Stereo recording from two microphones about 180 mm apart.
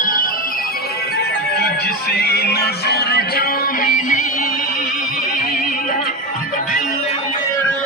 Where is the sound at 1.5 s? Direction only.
65° left (ahead or behind).